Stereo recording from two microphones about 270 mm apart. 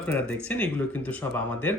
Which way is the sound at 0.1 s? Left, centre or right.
Centre.